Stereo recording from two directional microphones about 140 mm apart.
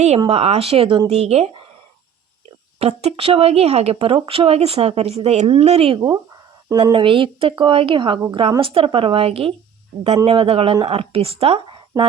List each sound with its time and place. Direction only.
0.3 s speech: 45° right (ahead or behind)
1.1 s speech: 50° right (ahead or behind)
2.7 s a woman's voice: 45° right (ahead or behind)